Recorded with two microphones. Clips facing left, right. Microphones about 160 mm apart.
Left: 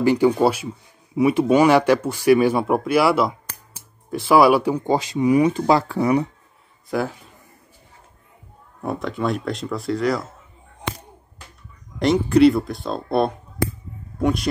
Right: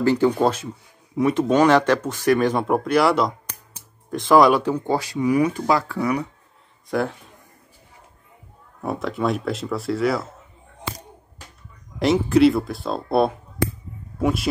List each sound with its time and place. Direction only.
0.0 s speech: 15° left (ahead or behind)
6.9 s speech: centre (ahead or behind)
8.8 s speech: centre (ahead or behind)
12.0 s speech: centre (ahead or behind)